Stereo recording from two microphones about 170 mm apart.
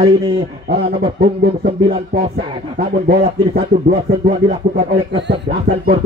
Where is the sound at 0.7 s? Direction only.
70° right (ahead or behind).